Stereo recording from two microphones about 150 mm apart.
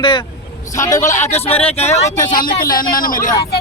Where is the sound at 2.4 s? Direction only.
70° left (ahead or behind).